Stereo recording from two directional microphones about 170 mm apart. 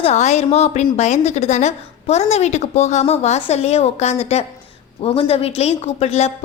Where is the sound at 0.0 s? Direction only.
40° left (ahead or behind).